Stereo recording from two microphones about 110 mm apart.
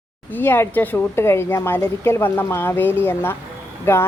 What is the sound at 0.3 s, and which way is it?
A woman's voice, 20° left (ahead or behind).